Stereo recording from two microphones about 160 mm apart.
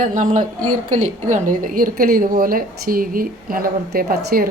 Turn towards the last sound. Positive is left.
turn(degrees=-70)  # may be behind; listen again after turning